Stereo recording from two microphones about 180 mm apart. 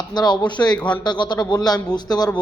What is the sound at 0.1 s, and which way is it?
Speech, 25° left (ahead or behind).